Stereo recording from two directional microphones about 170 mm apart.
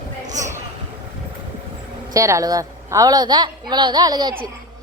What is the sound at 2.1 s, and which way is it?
A woman's voice, 20° right (ahead or behind).